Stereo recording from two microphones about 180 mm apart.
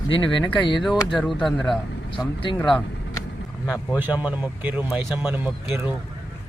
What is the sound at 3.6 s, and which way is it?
Speech, 15° left (ahead or behind).